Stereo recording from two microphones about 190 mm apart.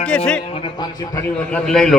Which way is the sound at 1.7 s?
5° left (ahead or behind).